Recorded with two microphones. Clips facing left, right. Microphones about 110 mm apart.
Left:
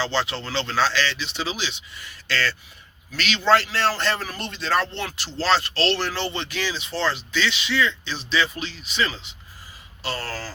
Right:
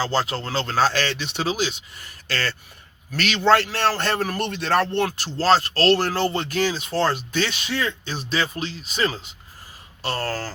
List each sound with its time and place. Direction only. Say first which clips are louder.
0.0 s a man's voice: right 2 dB; 40° right (ahead or behind)